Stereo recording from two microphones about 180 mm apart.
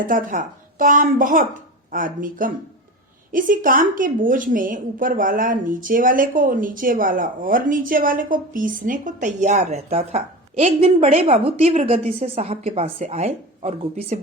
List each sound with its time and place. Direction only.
0.0 s a woman's voice: 50° right (ahead or behind)